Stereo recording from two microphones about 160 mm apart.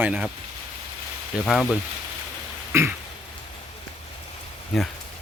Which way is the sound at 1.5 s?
Centre (ahead or behind).